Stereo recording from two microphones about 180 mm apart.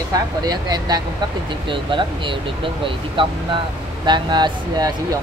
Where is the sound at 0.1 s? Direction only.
20° right (ahead or behind).